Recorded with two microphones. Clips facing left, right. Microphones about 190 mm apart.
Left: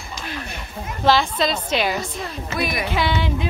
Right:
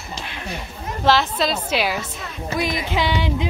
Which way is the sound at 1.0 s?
5° right (ahead or behind).